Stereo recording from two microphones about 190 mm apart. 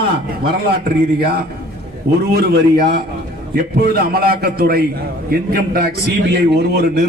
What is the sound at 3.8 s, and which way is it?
A man's voice, 55° right (ahead or behind).